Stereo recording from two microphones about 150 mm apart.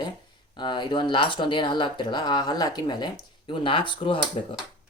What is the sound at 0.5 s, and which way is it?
Speech, 30° left (ahead or behind).